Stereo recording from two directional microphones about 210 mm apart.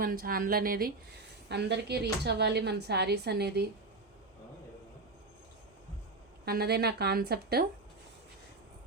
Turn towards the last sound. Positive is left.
turn(degrees=-50)  # may be behind; listen again after turning